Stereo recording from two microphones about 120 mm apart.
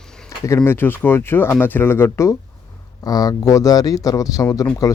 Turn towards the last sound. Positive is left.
turn(degrees=30)  # may be behind; listen again after turning